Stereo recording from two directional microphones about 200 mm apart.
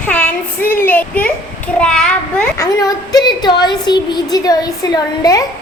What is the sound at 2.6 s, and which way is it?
A woman's voice, 20° left (ahead or behind).